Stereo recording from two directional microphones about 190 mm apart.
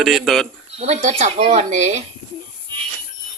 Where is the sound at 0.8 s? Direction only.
35° right (ahead or behind).